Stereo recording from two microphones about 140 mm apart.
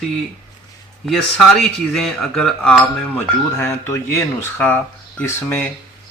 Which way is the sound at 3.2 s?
15° left (ahead or behind).